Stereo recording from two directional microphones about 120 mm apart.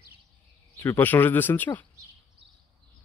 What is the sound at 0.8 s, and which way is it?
Speech, 15° left (ahead or behind).